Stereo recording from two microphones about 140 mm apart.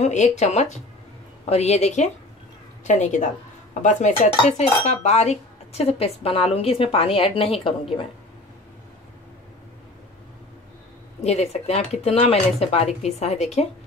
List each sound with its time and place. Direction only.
0.0 s speech: 55° left (ahead or behind)
11.1 s speech: 50° left (ahead or behind)